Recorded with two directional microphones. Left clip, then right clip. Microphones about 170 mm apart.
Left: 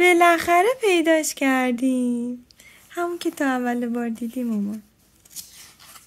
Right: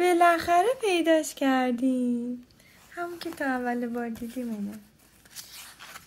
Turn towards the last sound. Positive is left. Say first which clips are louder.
# left 5 dB
turn(degrees=25)  # may be behind; listen again after turning